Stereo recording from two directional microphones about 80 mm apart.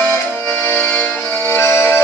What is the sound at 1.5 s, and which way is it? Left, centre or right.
Music, left.